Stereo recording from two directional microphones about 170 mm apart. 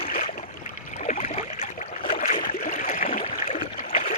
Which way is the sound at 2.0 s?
50° left (ahead or behind).